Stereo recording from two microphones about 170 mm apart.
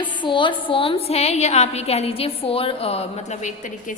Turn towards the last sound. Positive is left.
turn(degrees=45)  # may be behind; listen again after turning